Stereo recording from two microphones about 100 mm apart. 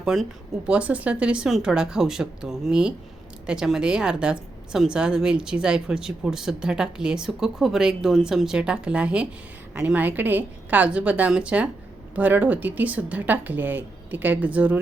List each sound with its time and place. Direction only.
0.0 s speech: centre (ahead or behind)
0.7 s a woman's voice: 15° right (ahead or behind)